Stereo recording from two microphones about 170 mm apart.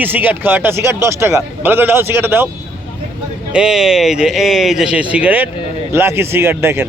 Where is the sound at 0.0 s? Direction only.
10° right (ahead or behind).